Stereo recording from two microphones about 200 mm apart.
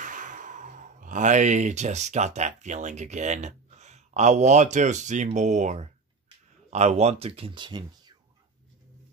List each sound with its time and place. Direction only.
0.0 s speech: 40° right (ahead or behind); by 7.8 s 25° right (ahead or behind)